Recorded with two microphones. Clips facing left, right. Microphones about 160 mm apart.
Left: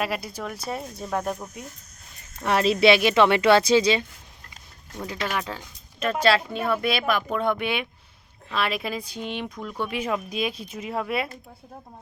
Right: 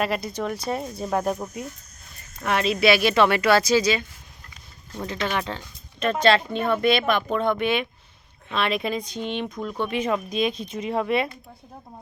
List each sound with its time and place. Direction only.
0.0 s speech: 5° left (ahead or behind)
2.5 s speech: 30° left (ahead or behind)
5.0 s speech: 5° left (ahead or behind)